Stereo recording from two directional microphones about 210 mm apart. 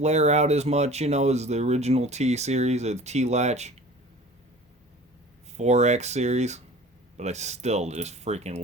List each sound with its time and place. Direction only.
0.0 s speech: 30° right (ahead or behind)
5.5 s speech: 30° right (ahead or behind)